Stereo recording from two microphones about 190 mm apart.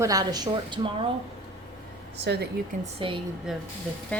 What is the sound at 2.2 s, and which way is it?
Speech, 65° right (ahead or behind).